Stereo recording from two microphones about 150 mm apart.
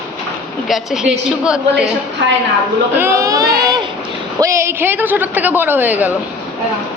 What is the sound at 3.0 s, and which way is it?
A woman's voice, 20° right (ahead or behind).